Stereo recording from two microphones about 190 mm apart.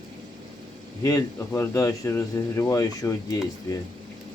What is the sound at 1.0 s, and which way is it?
Speech, 15° left (ahead or behind).